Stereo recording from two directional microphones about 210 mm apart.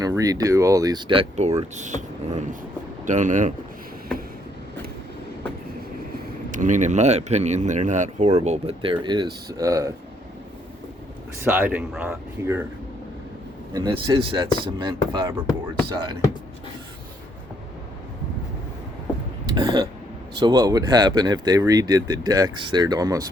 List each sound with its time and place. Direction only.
0.0 s speech: 15° right (ahead or behind); by 3.5 s 35° right (ahead or behind)
6.5 s speech: 35° right (ahead or behind); by 9.9 s 15° right (ahead or behind)
11.4 s speech: 10° right (ahead or behind)
13.7 s speech: 20° right (ahead or behind)
19.5 s speech: 20° right (ahead or behind)